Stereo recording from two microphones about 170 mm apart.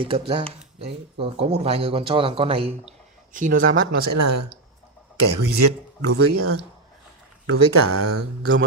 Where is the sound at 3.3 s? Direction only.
50° right (ahead or behind).